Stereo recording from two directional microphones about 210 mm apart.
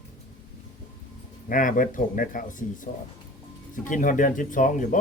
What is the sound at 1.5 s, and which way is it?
Speech, 40° left (ahead or behind).